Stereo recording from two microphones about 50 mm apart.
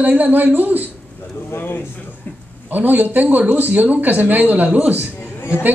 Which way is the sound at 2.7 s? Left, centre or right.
Right.